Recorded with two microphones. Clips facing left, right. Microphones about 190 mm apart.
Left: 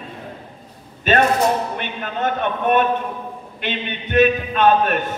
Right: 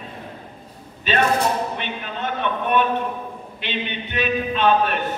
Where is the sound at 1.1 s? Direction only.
50° left (ahead or behind).